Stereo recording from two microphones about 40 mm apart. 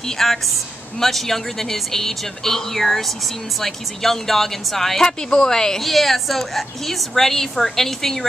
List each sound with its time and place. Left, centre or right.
0.2 s speech: centre
5.0 s speech: centre
5.8 s a woman's voice: centre